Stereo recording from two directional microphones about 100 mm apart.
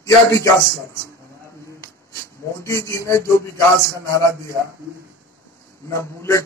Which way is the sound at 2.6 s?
30° left (ahead or behind).